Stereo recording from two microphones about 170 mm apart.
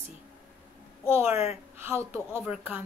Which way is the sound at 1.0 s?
15° right (ahead or behind).